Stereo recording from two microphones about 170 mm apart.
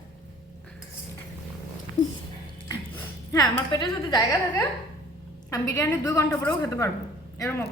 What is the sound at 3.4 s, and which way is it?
Speech, 25° left (ahead or behind).